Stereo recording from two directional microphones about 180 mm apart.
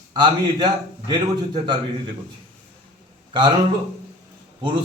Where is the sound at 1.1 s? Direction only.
25° right (ahead or behind).